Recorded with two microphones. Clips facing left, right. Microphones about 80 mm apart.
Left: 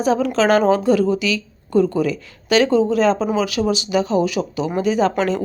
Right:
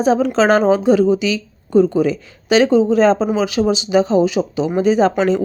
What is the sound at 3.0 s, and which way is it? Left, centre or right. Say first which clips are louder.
Speech: right 3 dB; right.